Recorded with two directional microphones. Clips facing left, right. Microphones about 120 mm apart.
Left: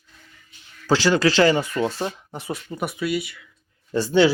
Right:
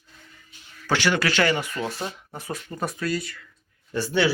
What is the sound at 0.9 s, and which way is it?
Speech, 30° left (ahead or behind).